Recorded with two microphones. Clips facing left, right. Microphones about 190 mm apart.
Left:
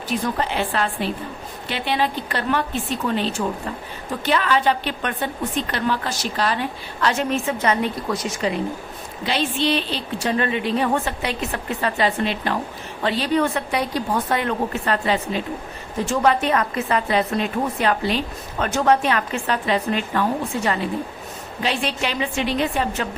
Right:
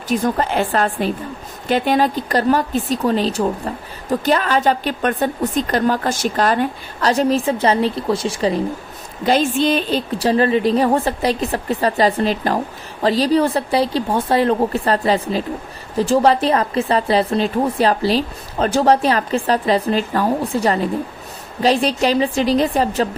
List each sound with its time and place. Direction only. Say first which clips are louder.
0.1 s a woman's voice: right 5 dB; 45° right (ahead or behind)
9.2 s a woman's voice: right 6 dB; 45° right (ahead or behind)